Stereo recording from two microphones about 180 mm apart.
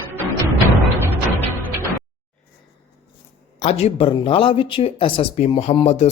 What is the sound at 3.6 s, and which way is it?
Speech, 35° left (ahead or behind).